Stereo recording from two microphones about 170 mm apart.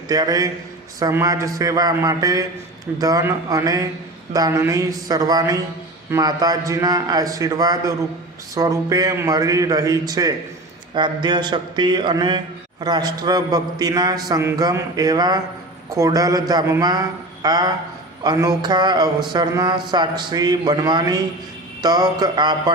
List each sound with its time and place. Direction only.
0.1 s speech: 20° right (ahead or behind)